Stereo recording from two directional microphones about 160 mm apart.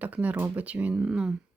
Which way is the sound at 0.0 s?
10° right (ahead or behind).